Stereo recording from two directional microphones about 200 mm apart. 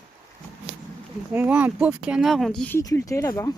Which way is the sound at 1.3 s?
10° right (ahead or behind).